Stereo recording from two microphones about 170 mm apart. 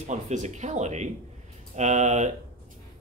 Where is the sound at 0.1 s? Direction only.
45° right (ahead or behind).